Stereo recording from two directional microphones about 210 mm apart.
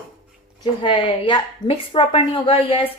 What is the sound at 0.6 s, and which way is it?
A woman's voice, 25° left (ahead or behind).